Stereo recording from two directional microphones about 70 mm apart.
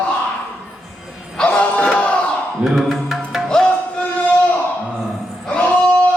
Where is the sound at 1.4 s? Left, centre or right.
Centre.